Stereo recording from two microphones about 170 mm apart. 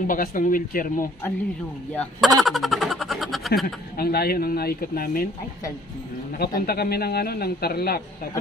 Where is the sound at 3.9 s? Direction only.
65° left (ahead or behind).